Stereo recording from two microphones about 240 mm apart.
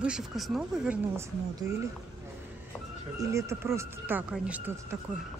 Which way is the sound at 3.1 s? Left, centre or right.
Centre.